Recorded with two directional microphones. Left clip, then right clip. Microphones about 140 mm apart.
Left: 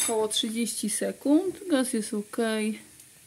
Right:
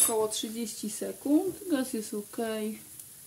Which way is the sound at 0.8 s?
35° left (ahead or behind).